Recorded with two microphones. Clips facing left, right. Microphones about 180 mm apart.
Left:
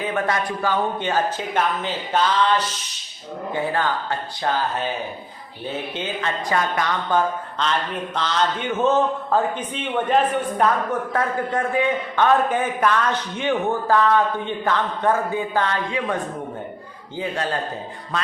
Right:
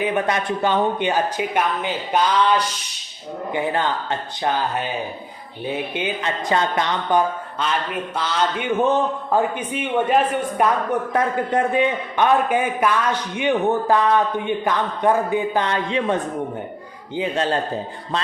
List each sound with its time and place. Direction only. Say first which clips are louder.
0.0 s a man's voice: right 2 dB; 20° right (ahead or behind)
5.9 s a man's voice: right 2 dB; 15° right (ahead or behind)
17.2 s speech: right 4 dB; 25° right (ahead or behind)